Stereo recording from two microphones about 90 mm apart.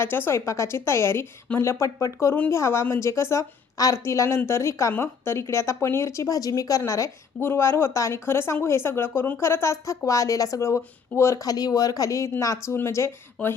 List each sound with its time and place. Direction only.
0.0 s a woman's voice: 25° left (ahead or behind)
11.5 s a woman's voice: 45° left (ahead or behind); by 13.6 s 30° left (ahead or behind)